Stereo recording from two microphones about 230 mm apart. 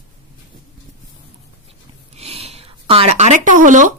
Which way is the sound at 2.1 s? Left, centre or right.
Right.